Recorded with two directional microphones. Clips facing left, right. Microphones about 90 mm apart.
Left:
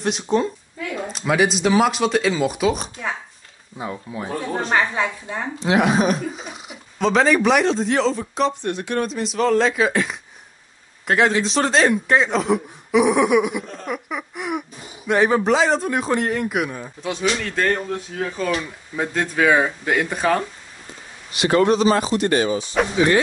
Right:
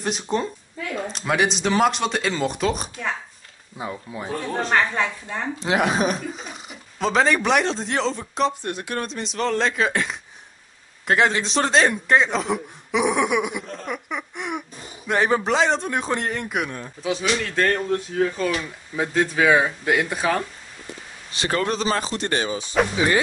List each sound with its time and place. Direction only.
0.0 s a woman's voice: centre (ahead or behind)
21.5 s speech: 35° left (ahead or behind)
22.8 s a woman's voice: centre (ahead or behind)